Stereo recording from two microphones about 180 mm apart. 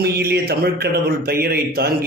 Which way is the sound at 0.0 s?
60° right (ahead or behind).